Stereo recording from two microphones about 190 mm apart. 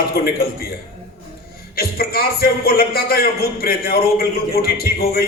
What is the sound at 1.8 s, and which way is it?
A man's voice, 55° left (ahead or behind).